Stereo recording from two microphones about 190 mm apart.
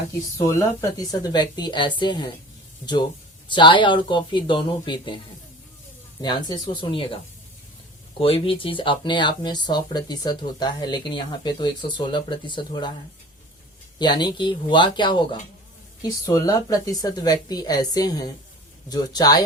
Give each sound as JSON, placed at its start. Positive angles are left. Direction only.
{"t": 0.1, "sound": "speech", "side_deg": 15}
{"t": 3.5, "sound": "speech", "side_deg": 25}
{"t": 6.2, "sound": "speech", "side_deg": 25}
{"t": 8.2, "sound": "speech", "side_deg": 30}
{"t": 14.0, "sound": "speech", "side_deg": 25}